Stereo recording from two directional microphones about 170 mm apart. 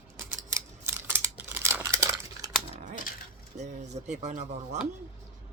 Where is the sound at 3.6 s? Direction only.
45° right (ahead or behind).